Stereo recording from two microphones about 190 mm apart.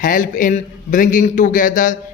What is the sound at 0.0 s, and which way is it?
A man's voice, 45° left (ahead or behind).